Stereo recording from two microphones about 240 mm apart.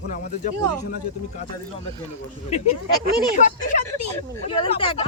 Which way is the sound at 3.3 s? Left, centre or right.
Left.